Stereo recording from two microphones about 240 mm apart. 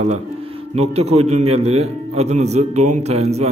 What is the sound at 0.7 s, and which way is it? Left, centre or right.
A man's voice, right.